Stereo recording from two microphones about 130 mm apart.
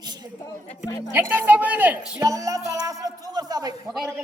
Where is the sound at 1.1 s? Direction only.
15° right (ahead or behind).